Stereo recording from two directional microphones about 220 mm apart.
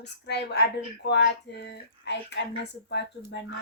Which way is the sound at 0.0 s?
50° left (ahead or behind).